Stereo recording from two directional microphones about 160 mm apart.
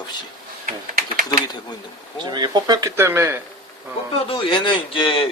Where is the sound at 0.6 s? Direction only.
55° right (ahead or behind).